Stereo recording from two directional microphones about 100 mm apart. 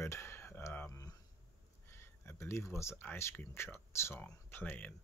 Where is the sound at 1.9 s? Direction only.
25° left (ahead or behind).